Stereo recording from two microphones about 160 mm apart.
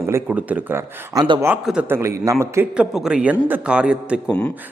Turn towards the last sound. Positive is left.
turn(degrees=-5)  # may be behind; listen again after turning